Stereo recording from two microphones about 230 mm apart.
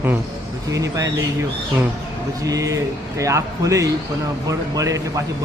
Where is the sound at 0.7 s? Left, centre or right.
Centre.